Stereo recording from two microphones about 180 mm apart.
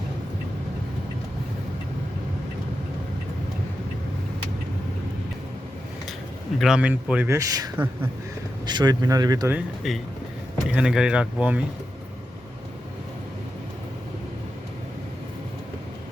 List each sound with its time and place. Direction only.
6.6 s speech: 5° right (ahead or behind); by 9.6 s 20° right (ahead or behind)
9.6 s speech: centre (ahead or behind)